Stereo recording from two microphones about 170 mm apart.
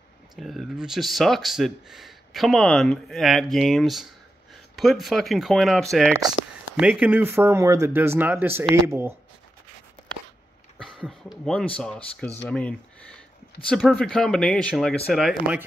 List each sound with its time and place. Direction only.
0.4 s speech: centre (ahead or behind)
10.8 s speech: centre (ahead or behind)